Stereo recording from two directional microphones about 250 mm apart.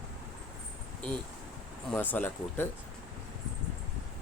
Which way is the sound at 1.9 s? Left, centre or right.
Centre.